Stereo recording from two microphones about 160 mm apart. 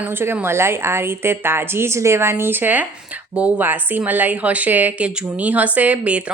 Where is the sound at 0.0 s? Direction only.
15° right (ahead or behind).